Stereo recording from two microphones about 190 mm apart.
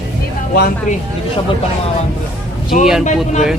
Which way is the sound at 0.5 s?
55° left (ahead or behind).